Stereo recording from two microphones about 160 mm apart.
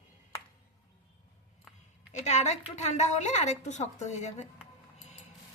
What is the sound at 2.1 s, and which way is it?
A woman's voice, 45° left (ahead or behind).